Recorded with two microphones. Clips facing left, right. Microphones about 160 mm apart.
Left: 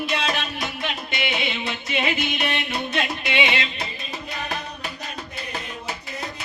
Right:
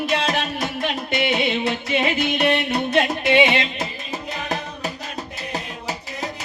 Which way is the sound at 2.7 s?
50° right (ahead or behind).